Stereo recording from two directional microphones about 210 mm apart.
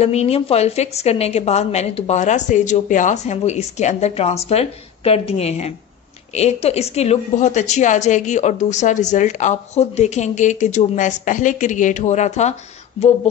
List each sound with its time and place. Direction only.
0.0 s a woman's voice: 30° left (ahead or behind)